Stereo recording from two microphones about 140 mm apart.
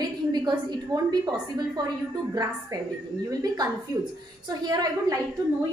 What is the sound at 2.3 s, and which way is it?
A woman's voice, 25° right (ahead or behind).